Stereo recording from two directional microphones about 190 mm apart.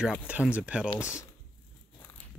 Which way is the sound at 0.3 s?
5° right (ahead or behind).